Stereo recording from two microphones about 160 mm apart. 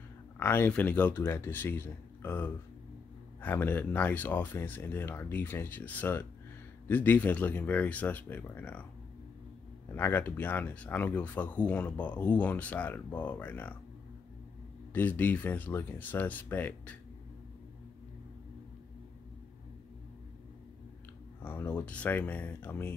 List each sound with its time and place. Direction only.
0.4 s speech: 10° left (ahead or behind)
9.9 s speech: 15° left (ahead or behind)
15.0 s speech: 10° left (ahead or behind)
21.4 s speech: 15° left (ahead or behind)